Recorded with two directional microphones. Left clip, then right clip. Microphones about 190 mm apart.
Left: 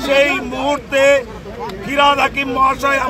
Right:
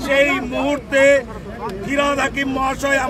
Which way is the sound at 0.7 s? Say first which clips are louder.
Left 1 dB; 10° right (ahead or behind).